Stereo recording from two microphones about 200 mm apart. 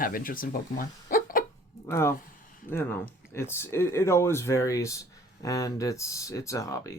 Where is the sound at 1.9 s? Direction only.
15° left (ahead or behind).